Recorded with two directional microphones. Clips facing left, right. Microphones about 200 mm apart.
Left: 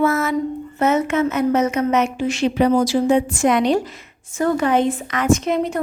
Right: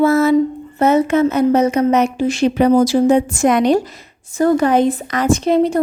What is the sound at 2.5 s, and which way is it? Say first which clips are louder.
A woman's voice: right 4 dB; 45° right (ahead or behind).